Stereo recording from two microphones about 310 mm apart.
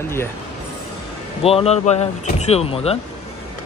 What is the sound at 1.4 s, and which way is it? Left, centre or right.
Speech, centre.